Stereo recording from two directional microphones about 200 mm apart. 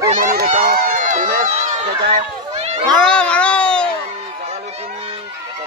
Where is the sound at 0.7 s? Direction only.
40° right (ahead or behind).